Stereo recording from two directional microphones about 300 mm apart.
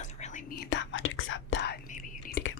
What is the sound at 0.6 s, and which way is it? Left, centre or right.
Whispering, left.